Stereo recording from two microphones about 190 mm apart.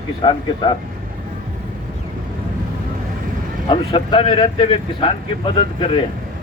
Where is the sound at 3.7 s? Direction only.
25° left (ahead or behind).